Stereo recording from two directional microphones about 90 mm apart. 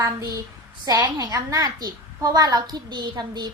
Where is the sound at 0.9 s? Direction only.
40° right (ahead or behind).